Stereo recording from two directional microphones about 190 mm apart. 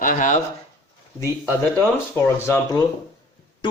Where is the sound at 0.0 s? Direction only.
45° left (ahead or behind).